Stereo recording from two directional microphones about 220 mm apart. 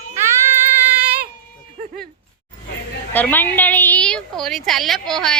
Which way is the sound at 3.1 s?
10° left (ahead or behind).